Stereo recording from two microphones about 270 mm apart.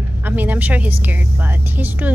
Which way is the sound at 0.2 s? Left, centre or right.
Centre.